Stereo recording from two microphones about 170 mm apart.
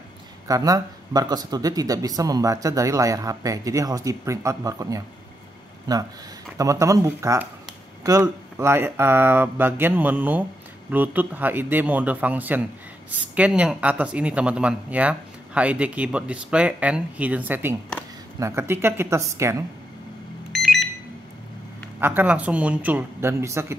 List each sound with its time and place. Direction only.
0.5 s speech: 20° right (ahead or behind)
20.5 s alarm: centre (ahead or behind)
22.0 s speech: 10° right (ahead or behind)